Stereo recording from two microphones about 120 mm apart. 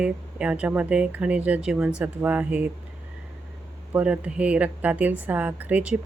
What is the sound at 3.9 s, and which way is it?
A woman's voice, 10° right (ahead or behind).